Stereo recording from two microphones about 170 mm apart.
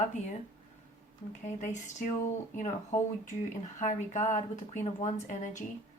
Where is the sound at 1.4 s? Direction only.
45° left (ahead or behind).